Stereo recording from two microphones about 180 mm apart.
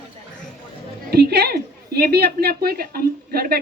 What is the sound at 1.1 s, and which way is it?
A woman's voice, 65° right (ahead or behind).